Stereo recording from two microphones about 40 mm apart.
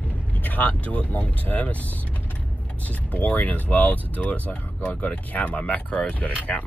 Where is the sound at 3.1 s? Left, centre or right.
Left.